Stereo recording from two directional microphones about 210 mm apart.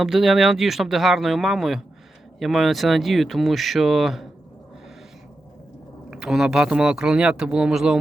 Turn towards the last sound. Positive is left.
turn(degrees=-5)  # may be behind; listen again after turning